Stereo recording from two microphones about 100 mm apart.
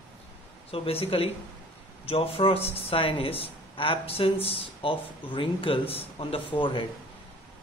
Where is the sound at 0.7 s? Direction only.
75° left (ahead or behind).